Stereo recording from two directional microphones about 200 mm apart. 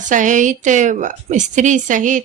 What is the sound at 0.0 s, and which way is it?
A woman's voice, 40° right (ahead or behind).